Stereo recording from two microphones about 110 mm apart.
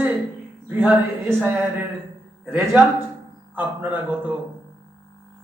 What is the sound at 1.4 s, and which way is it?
Speech, 15° right (ahead or behind).